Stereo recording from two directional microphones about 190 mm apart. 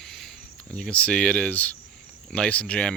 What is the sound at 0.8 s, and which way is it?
Speech, 5° left (ahead or behind).